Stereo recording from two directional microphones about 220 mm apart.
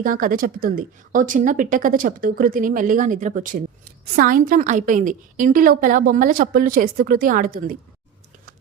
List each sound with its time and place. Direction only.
0.0 s a woman's voice: 40° right (ahead or behind)